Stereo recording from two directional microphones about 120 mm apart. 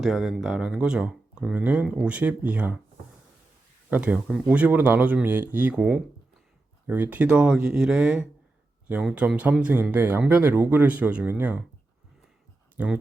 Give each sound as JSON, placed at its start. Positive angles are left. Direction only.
{"t": 0.0, "sound": "speech", "side_deg": -5}
{"t": 3.8, "sound": "speech", "side_deg": -15}
{"t": 12.7, "sound": "speech", "side_deg": -10}